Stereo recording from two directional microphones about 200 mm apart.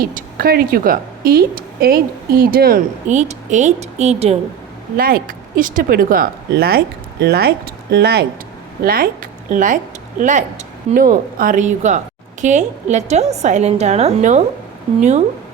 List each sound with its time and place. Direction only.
0.0 s a woman's voice: 45° right (ahead or behind)
4.9 s a woman's voice: 45° right (ahead or behind)